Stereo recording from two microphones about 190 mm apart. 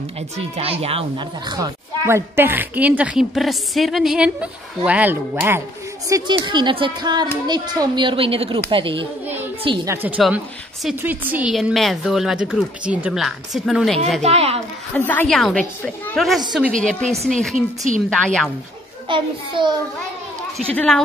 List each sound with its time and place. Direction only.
0.6 s a woman's voice: 30° right (ahead or behind); by 5.6 s 10° right (ahead or behind)
6.0 s a woman's voice: 20° right (ahead or behind)
9.8 s a woman's voice: 5° right (ahead or behind)
14.2 s a woman's voice: 30° right (ahead or behind)
15.0 s a woman's voice: 10° left (ahead or behind)
19.0 s a woman's voice: 25° right (ahead or behind)
20.5 s a woman's voice: 5° left (ahead or behind)